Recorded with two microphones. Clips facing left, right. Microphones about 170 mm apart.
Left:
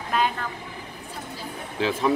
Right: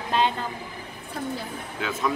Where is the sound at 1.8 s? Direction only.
30° left (ahead or behind).